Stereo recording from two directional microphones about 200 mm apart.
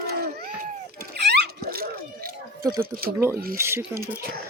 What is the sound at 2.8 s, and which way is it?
Speech, 50° right (ahead or behind).